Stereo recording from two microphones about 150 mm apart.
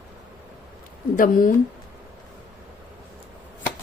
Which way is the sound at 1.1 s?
65° left (ahead or behind).